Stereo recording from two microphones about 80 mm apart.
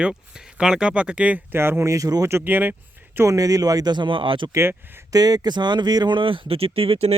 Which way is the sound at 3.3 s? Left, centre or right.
Right.